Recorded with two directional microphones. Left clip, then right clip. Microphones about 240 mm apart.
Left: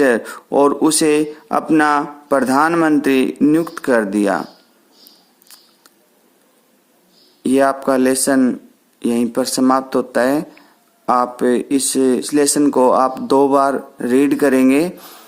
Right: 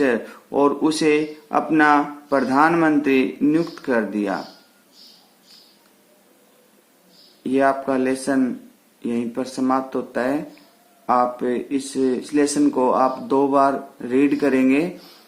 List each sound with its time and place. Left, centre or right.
0.0 s speech: left
7.4 s speech: left